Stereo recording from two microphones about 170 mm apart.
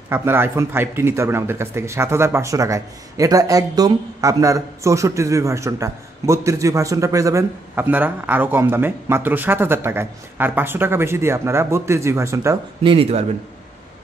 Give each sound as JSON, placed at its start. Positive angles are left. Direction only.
{"t": 0.1, "sound": "speech", "side_deg": -15}
{"t": 12.8, "sound": "speech", "side_deg": -30}